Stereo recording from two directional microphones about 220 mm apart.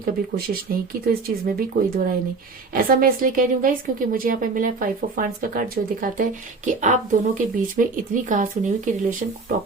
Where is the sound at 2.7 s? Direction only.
40° right (ahead or behind).